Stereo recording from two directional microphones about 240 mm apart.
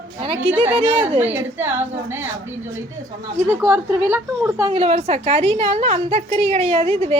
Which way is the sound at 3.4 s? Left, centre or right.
Centre.